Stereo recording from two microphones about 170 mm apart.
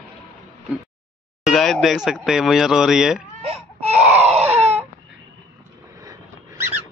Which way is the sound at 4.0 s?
5° right (ahead or behind).